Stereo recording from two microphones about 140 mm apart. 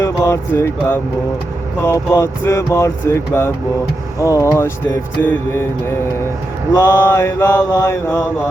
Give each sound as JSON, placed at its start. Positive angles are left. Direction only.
{"t": 0.0, "sound": "speech", "side_deg": 20}
{"t": 5.2, "sound": "mantra", "side_deg": 10}
{"t": 6.7, "sound": "speech", "side_deg": 20}